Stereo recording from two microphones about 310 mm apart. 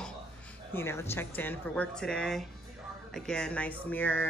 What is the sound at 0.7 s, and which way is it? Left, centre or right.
A woman's voice, centre.